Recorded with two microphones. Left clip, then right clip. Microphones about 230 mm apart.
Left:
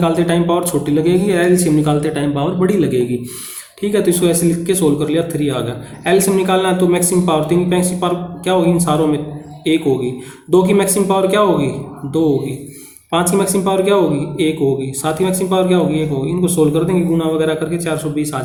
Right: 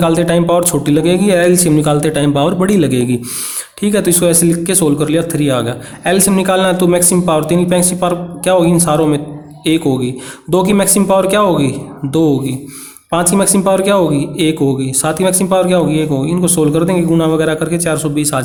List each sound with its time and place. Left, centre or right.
0.0 s speech: right
13.1 s speech: right